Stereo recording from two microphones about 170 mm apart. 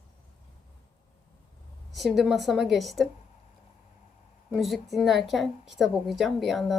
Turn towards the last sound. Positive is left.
turn(degrees=0)  # may be behind; listen again after turning